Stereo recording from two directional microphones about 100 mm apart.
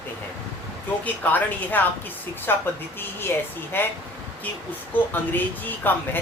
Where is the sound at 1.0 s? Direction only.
15° left (ahead or behind).